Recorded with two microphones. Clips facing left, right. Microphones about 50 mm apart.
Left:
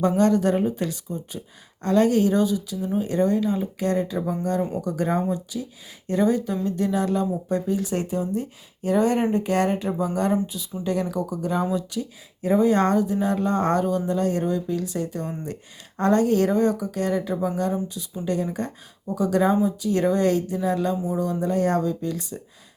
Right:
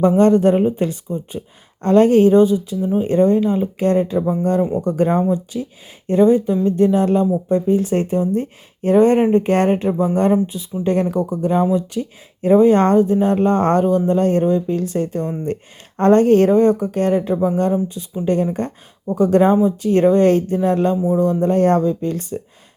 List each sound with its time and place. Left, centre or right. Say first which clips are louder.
0.2 s speech: right 6 dB; right
21.0 s speech: right 9 dB; right
21.2 s speech: right 7 dB; right